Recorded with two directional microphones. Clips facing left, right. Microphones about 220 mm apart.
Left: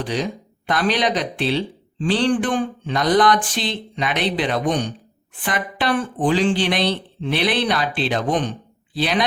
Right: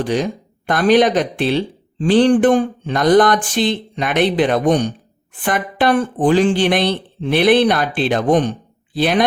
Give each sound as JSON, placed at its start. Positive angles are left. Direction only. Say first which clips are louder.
{"t": 0.0, "sound": "speech", "louder": "right 5 dB", "side_deg": -50}